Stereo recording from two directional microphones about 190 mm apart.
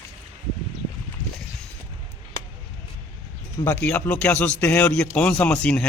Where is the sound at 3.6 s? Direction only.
10° left (ahead or behind).